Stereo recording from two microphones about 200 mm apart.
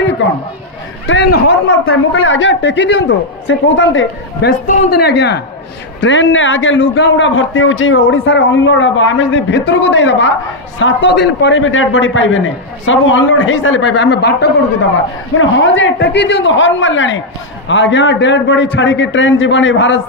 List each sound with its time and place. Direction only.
1.0 s a man's voice: 60° left (ahead or behind)
4.6 s speech: 50° left (ahead or behind)
6.0 s a man's voice: 70° left (ahead or behind)
15.3 s a man's voice: 70° left (ahead or behind)